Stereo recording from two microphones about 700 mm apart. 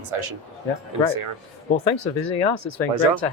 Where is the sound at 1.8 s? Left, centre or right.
Left.